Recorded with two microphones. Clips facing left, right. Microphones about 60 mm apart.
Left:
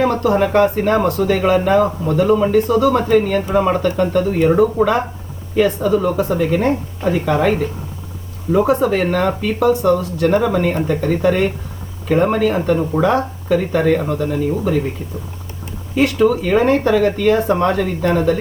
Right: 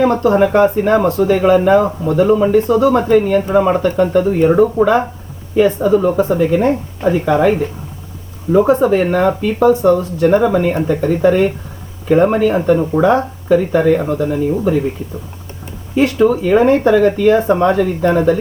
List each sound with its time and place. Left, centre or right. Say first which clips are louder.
0.1 s speech: right 3 dB; centre
8.8 s speech: right 4 dB; centre
16.0 s speech: right 2 dB; centre